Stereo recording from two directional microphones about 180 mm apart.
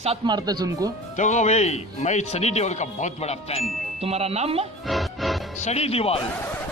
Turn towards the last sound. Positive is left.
turn(degrees=35)  # may be behind; listen again after turning